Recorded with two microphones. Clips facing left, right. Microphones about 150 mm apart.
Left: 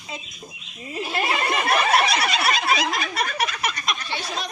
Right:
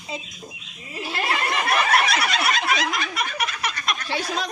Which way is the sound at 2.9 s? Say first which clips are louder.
Left 1 dB; 35° left (ahead or behind).